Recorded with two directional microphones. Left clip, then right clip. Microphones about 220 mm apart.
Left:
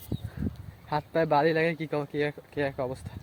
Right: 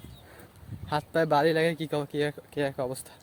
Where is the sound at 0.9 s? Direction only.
5° right (ahead or behind).